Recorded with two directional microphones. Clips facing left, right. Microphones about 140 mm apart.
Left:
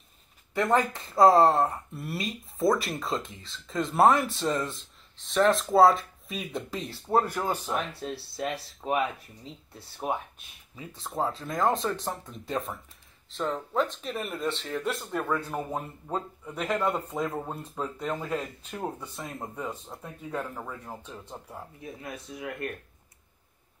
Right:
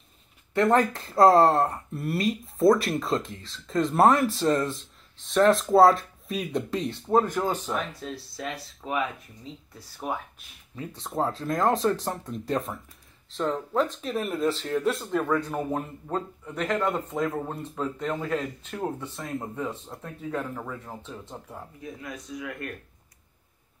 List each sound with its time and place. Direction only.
0.6 s speech: centre (ahead or behind)
7.9 s speech: 30° left (ahead or behind)
8.5 s speech: centre (ahead or behind)
10.8 s speech: centre (ahead or behind)
22.0 s speech: 25° left (ahead or behind)